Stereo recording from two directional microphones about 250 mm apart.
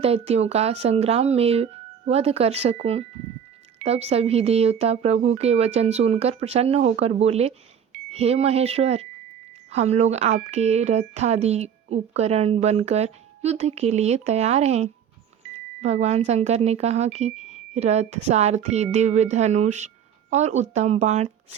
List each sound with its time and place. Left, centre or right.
0.0 s speech: right